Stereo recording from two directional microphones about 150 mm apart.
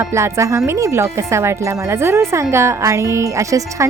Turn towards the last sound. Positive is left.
turn(degrees=-20)  # may be behind; listen again after turning